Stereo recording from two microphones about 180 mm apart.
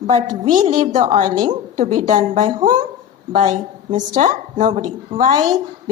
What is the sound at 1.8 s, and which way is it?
A woman's voice, 45° right (ahead or behind).